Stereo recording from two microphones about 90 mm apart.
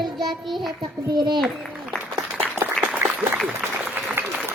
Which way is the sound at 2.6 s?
25° right (ahead or behind).